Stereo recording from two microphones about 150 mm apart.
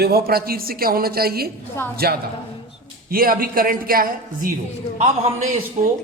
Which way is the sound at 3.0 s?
75° right (ahead or behind).